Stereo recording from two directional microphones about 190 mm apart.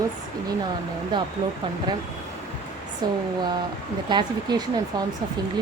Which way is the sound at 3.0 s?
20° right (ahead or behind).